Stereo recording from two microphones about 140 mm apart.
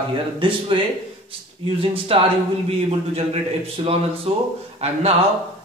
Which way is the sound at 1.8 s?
40° right (ahead or behind).